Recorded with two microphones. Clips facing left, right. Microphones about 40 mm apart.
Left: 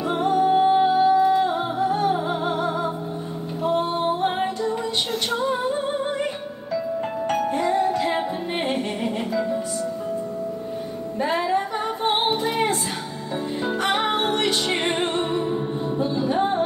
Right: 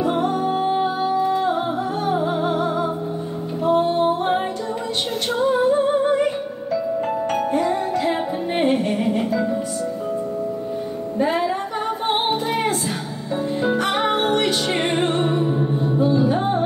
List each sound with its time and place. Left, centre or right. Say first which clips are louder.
0.0 s music: even; centre
5.5 s music: right 7 dB; centre
11.1 s music: right 1 dB; centre
13.9 s music: right 3 dB; centre